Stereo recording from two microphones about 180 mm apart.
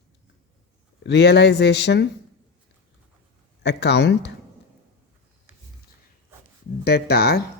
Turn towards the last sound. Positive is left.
turn(degrees=60)  # may be behind; listen again after turning